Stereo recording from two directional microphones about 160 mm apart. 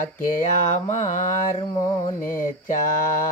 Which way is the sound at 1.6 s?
25° left (ahead or behind).